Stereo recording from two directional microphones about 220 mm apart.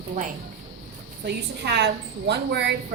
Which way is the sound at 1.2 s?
50° right (ahead or behind).